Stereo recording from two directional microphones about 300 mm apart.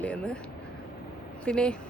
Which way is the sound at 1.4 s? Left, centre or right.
Centre.